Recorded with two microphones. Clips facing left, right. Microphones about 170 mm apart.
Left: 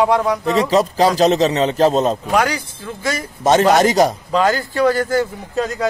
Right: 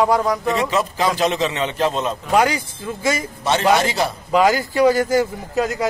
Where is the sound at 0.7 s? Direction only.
35° left (ahead or behind).